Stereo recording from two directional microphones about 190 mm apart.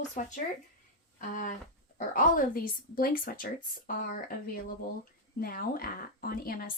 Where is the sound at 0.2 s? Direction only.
40° left (ahead or behind).